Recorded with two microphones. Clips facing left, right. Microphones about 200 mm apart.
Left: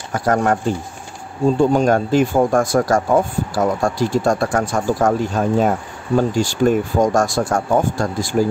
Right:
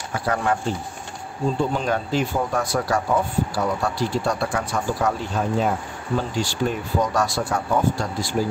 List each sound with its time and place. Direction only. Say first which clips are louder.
0.1 s speech: left 6 dB; 45° left (ahead or behind)
1.6 s speech: left 10 dB; 45° left (ahead or behind)